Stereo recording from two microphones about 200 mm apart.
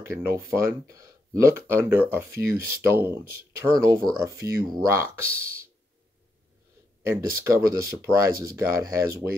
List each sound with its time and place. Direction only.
0.0 s speech: 15° right (ahead or behind)
7.0 s speech: 15° right (ahead or behind)